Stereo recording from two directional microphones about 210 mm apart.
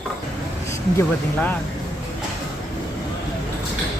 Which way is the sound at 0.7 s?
10° left (ahead or behind).